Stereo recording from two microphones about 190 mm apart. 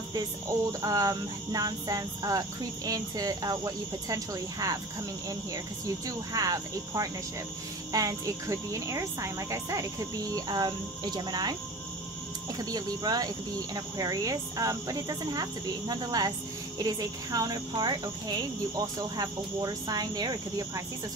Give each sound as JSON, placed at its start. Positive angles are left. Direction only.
{"t": 0.1, "sound": "speech", "side_deg": -20}
{"t": 6.0, "sound": "speech", "side_deg": -20}
{"t": 12.5, "sound": "speech", "side_deg": -20}